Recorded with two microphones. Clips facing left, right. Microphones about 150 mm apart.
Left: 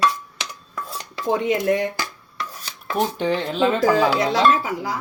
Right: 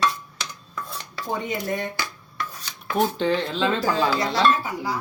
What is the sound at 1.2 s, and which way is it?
Chopping, 90° left.